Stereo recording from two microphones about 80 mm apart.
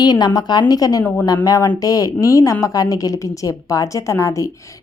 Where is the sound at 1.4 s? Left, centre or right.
Left.